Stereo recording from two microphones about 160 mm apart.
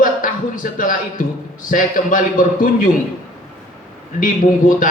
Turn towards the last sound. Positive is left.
turn(degrees=55)  # may be behind; listen again after turning